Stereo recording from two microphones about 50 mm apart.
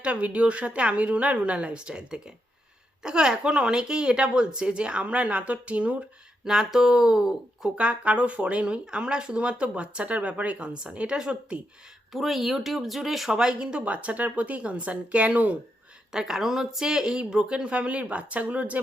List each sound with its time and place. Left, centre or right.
0.0 s speech: right
6.4 s speech: centre
7.8 s speech: right
12.1 s speech: centre
13.3 s speech: centre
16.1 s speech: centre; by 18.8 s right